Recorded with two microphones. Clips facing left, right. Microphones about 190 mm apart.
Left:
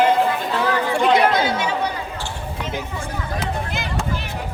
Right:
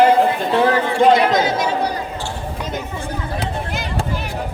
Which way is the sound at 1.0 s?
45° right (ahead or behind).